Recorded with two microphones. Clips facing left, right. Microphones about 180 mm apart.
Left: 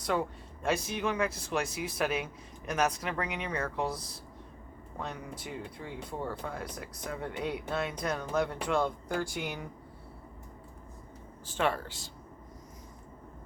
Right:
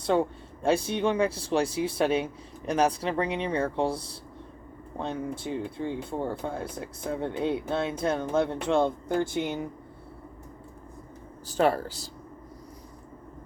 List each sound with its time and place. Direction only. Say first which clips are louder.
0.0 s speech: right 6 dB; 30° right (ahead or behind)
11.4 s speech: right 7 dB; 40° right (ahead or behind)